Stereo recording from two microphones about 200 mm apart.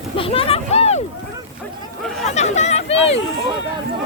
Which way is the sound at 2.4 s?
35° left (ahead or behind).